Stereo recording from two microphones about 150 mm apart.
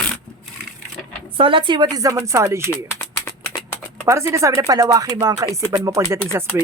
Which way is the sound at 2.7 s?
15° left (ahead or behind).